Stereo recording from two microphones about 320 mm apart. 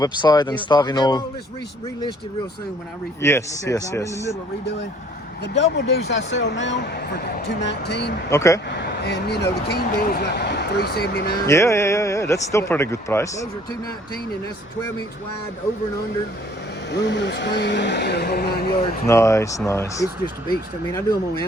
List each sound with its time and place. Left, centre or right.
0.0 s speech: centre
3.2 s speech: centre
5.4 s speech: left
8.3 s speech: centre
8.7 s speech: left
11.4 s speech: centre
16.9 s speech: left
19.0 s speech: centre